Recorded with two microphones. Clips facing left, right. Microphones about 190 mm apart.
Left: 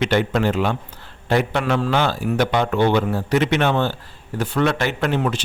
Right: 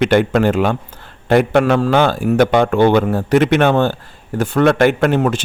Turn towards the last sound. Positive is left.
turn(degrees=-50)  # may be behind; listen again after turning